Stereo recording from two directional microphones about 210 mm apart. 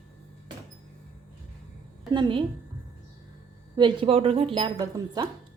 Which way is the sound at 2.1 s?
20° right (ahead or behind).